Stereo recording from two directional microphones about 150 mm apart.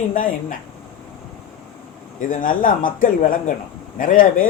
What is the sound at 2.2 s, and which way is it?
A man's voice, 65° left (ahead or behind).